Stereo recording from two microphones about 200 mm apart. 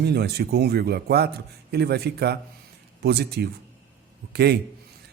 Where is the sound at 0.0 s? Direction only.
55° right (ahead or behind).